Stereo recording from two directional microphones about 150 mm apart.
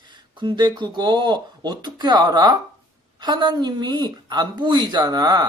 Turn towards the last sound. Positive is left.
turn(degrees=-25)  # may be behind; listen again after turning